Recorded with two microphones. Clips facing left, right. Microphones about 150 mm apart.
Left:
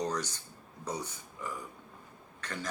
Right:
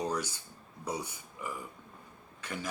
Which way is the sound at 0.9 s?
10° right (ahead or behind).